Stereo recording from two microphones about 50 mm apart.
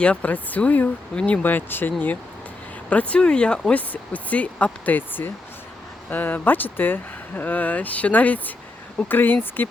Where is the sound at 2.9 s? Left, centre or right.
Left.